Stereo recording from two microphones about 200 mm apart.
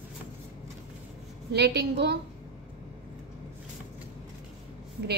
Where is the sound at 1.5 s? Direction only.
55° right (ahead or behind).